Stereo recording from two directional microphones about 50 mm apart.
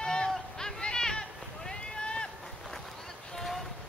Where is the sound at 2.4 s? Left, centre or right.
Centre.